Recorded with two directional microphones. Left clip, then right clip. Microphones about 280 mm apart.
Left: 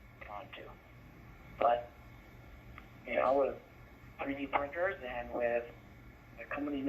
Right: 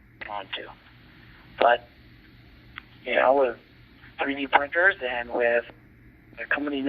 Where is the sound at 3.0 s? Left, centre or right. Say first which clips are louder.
Right 10 dB; centre.